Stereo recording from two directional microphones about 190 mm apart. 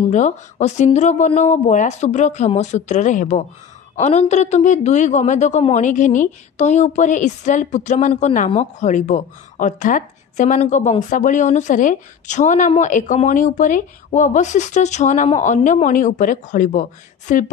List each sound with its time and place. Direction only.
0.1 s a man's voice: 40° left (ahead or behind)